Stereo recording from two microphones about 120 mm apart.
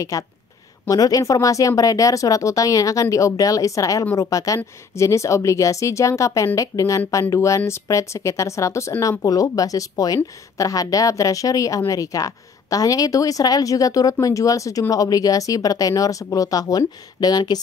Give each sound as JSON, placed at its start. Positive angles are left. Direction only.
{"t": 0.1, "sound": "a woman's voice", "side_deg": 25}